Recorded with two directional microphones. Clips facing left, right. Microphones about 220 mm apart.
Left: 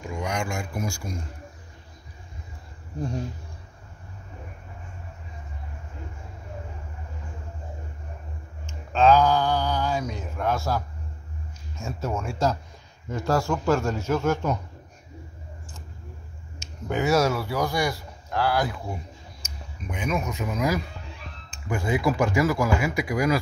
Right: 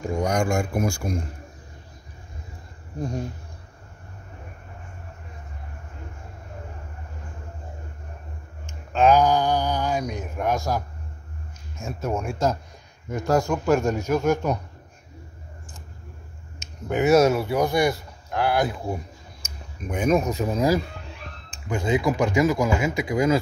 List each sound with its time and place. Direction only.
0.0 s speech: 40° right (ahead or behind); by 1.2 s 55° right (ahead or behind)
8.6 s speech: 15° right (ahead or behind)
11.8 s a man's voice: 15° right (ahead or behind)
16.5 s speech: 20° right (ahead or behind)
19.9 s speech: 45° right (ahead or behind)
21.6 s speech: 20° right (ahead or behind)